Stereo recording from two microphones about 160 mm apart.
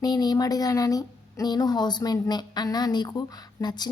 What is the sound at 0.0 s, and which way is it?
A woman's voice, 25° left (ahead or behind).